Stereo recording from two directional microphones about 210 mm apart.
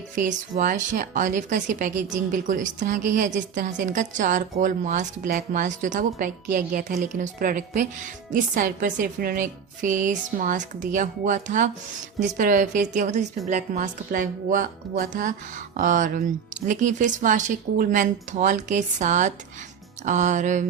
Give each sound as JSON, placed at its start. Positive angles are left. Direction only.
{"t": 0.2, "sound": "a woman's voice", "side_deg": -35}